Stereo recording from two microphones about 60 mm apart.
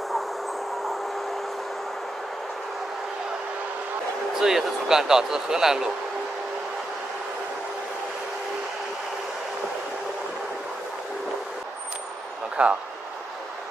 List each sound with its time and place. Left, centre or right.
4.4 s speech: centre
12.6 s speech: right